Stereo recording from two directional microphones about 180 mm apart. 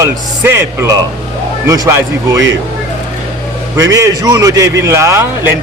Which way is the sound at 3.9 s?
20° right (ahead or behind).